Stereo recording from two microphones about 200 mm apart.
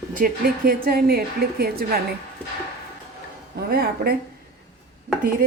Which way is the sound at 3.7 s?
50° right (ahead or behind).